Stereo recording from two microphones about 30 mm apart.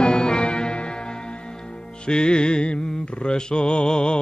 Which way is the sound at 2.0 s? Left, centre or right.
Left.